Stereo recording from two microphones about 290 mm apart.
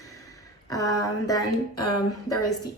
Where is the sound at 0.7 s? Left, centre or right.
Centre.